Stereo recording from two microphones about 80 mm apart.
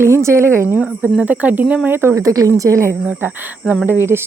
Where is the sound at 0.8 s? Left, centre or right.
Centre.